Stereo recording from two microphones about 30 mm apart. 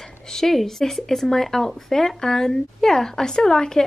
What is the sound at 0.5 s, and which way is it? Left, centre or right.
Speech, centre.